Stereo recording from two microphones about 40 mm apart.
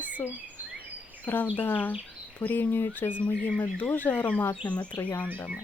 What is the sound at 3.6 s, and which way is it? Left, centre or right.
Speech, left.